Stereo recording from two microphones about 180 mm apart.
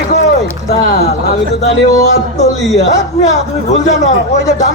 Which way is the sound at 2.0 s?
40° left (ahead or behind).